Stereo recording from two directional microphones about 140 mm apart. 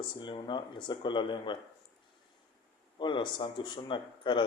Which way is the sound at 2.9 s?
35° left (ahead or behind).